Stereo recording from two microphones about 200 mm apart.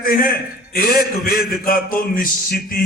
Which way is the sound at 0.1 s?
45° left (ahead or behind).